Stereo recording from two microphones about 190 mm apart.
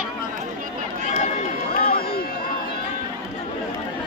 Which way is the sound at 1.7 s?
50° left (ahead or behind).